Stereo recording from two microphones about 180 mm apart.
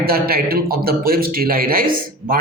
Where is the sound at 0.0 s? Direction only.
55° right (ahead or behind).